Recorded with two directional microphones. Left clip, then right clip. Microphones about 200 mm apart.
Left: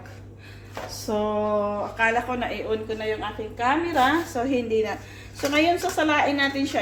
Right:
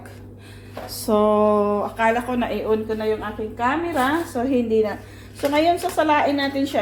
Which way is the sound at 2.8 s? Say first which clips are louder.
Right 4 dB; 20° right (ahead or behind).